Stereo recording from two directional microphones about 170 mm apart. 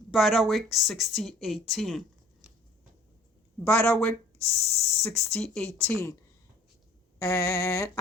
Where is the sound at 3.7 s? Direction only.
5° left (ahead or behind).